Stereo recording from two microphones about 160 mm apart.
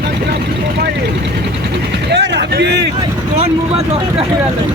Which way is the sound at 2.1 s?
90° right.